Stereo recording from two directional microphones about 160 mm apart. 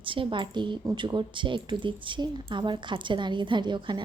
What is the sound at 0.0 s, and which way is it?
Speech, 30° right (ahead or behind).